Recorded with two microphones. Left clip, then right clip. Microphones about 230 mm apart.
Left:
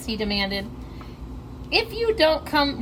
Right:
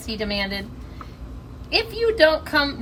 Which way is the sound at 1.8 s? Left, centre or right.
Centre.